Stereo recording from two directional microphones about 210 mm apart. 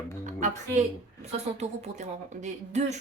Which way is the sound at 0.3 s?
35° right (ahead or behind).